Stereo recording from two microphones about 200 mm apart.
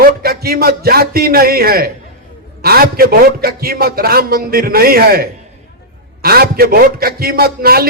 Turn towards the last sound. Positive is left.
turn(degrees=-50)  # may be behind; listen again after turning